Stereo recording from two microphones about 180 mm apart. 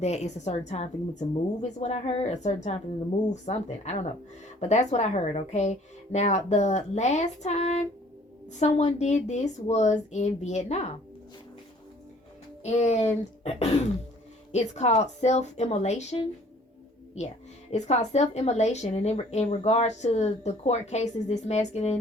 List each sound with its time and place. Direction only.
0.0 s speech: 40° left (ahead or behind)
12.6 s speech: 35° left (ahead or behind)
17.7 s speech: 40° left (ahead or behind)